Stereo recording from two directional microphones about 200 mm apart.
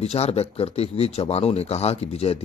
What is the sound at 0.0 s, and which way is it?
Speech, 30° left (ahead or behind).